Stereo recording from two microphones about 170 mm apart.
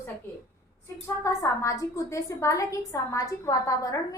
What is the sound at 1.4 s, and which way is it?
A woman's voice, 20° left (ahead or behind).